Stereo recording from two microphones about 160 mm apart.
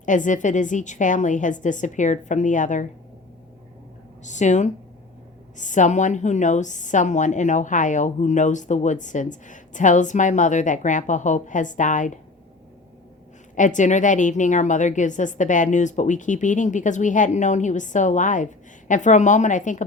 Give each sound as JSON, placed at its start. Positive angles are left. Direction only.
{"t": 0.0, "sound": "a woman's voice", "side_deg": 50}
{"t": 4.2, "sound": "a woman's voice", "side_deg": 50}
{"t": 13.6, "sound": "a woman's voice", "side_deg": 50}